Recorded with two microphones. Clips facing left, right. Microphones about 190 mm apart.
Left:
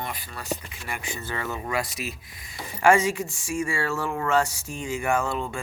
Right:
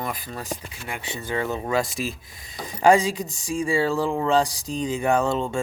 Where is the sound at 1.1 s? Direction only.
20° right (ahead or behind).